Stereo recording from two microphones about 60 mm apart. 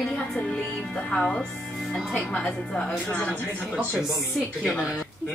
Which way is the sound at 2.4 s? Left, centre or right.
Centre.